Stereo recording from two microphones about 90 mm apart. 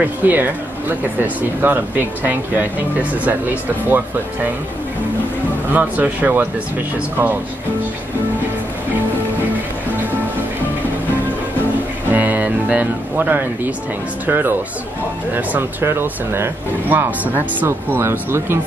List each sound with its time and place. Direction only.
0.0 s speech: 20° right (ahead or behind)
5.7 s speech: 20° right (ahead or behind)
12.1 s speech: 20° right (ahead or behind)